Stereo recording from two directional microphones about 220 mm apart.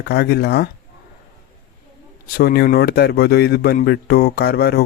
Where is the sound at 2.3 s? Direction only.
45° left (ahead or behind).